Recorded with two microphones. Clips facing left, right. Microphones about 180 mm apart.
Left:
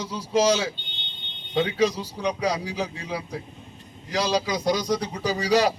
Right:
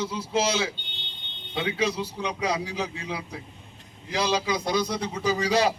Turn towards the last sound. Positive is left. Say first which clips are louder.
# left 2 dB
turn(degrees=35)  # may be behind; listen again after turning